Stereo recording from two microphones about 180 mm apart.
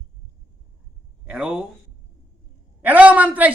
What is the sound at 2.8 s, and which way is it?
Speech, 10° right (ahead or behind).